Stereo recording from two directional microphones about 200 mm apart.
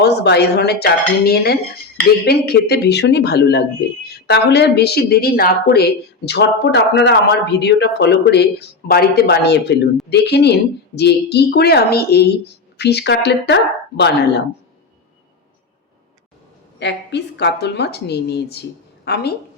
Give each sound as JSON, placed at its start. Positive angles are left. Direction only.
{"t": 0.0, "sound": "a woman's voice", "side_deg": 55}
{"t": 16.8, "sound": "a woman's voice", "side_deg": 60}